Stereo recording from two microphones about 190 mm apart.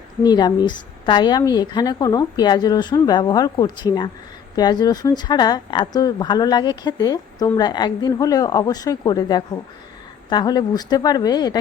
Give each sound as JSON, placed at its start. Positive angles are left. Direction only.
{"t": 0.2, "sound": "speech", "side_deg": 20}